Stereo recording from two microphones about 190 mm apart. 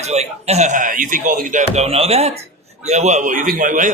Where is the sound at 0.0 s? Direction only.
35° right (ahead or behind).